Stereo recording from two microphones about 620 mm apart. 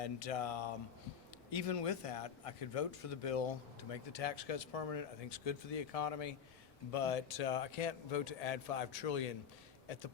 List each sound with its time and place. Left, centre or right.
0.0 s speech: left